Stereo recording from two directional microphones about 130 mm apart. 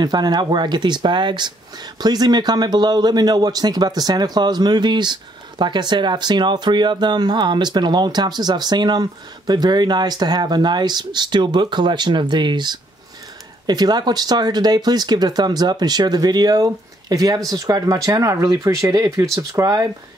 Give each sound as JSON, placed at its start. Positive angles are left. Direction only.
{"t": 0.0, "sound": "speech", "side_deg": -30}